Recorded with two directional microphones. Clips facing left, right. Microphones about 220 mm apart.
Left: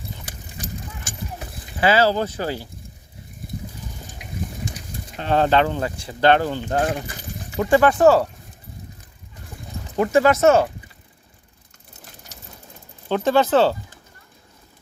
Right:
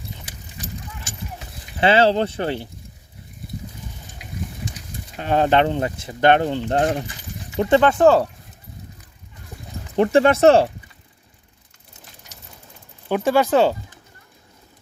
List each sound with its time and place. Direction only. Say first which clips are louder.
1.8 s speech: right 2 dB; 25° right (ahead or behind)
5.1 s speech: right 1 dB; 15° right (ahead or behind)
7.8 s speech: even; 5° left (ahead or behind)
9.9 s speech: right 1 dB; 30° right (ahead or behind)
13.1 s speech: even; 10° right (ahead or behind)